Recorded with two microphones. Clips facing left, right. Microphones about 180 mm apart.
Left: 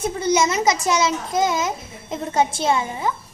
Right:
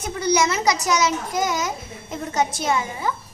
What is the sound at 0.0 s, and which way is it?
A child's voice, 25° left (ahead or behind).